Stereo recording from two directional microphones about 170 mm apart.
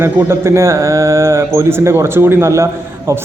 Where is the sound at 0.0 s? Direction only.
15° right (ahead or behind).